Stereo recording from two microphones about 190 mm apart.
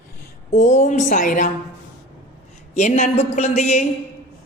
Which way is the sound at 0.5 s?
40° left (ahead or behind).